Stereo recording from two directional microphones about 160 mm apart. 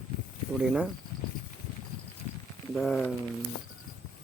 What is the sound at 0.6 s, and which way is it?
Speech, centre (ahead or behind).